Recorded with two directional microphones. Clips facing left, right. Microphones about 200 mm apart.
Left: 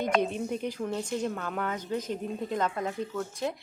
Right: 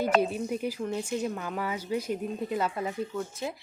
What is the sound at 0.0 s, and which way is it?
A woman's voice, 5° right (ahead or behind).